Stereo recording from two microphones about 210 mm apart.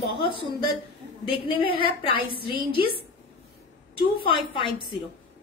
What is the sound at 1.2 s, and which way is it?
Speech, 25° left (ahead or behind).